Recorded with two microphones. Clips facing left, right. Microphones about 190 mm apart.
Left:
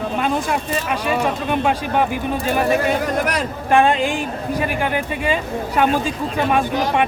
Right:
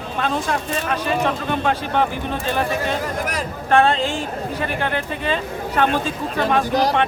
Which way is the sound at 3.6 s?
15° left (ahead or behind).